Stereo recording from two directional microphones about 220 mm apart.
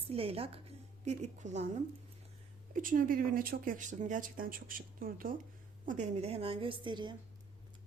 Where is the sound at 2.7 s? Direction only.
40° right (ahead or behind); by 7.1 s 20° right (ahead or behind).